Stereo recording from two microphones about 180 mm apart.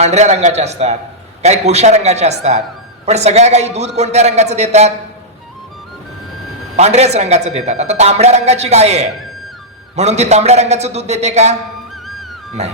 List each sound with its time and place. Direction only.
0.0 s a man's voice: 40° right (ahead or behind)
6.7 s a man's voice: 40° right (ahead or behind)
12.6 s a man's voice: 40° right (ahead or behind)